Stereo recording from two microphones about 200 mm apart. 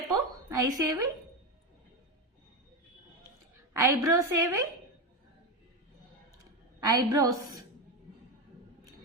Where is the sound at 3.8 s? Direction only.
15° right (ahead or behind).